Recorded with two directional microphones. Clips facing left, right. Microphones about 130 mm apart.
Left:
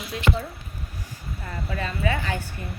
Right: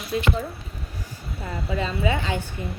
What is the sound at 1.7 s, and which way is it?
Speech, 20° right (ahead or behind).